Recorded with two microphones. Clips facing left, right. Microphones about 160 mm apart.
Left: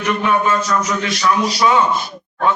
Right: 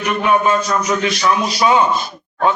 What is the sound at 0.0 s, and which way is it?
A man's voice, 20° right (ahead or behind).